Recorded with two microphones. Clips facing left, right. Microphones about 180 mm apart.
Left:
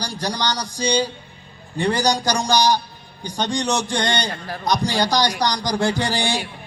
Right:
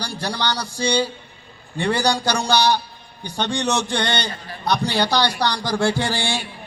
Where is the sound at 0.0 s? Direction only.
15° left (ahead or behind).